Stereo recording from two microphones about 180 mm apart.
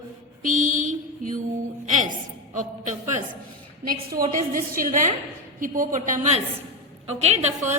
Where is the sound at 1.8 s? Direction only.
45° right (ahead or behind).